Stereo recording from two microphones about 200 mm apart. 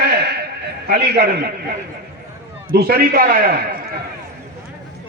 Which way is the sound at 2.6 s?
50° right (ahead or behind).